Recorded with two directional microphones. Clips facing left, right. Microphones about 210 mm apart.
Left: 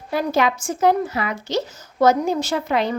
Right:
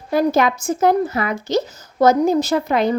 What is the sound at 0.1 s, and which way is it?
Speech, 45° right (ahead or behind).